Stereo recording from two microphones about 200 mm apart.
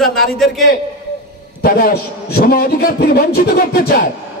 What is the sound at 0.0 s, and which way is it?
Speech, centre (ahead or behind).